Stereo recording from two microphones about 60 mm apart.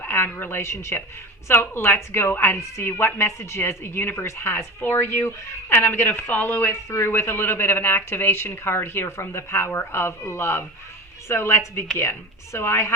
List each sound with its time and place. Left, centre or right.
0.0 s a woman's voice: left